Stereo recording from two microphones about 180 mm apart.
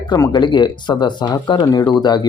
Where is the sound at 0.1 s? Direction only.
25° left (ahead or behind).